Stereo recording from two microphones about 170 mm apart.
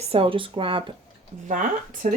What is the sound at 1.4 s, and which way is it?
Speech, 50° right (ahead or behind).